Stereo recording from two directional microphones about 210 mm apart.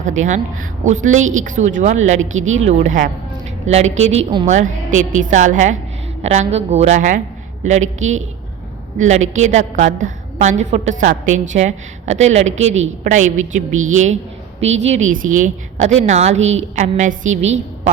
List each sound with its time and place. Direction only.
0.0 s a woman's voice: 35° right (ahead or behind)